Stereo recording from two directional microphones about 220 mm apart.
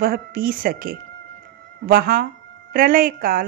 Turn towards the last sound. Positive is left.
turn(degrees=-40)  # may be behind; listen again after turning